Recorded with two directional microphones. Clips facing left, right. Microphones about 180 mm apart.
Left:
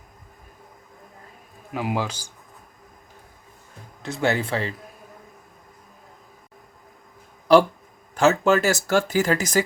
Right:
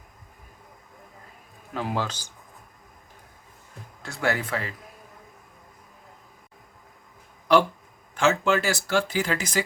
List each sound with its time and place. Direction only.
1.7 s speech: 10° left (ahead or behind)
4.0 s speech: 25° left (ahead or behind)
7.5 s speech: 35° left (ahead or behind)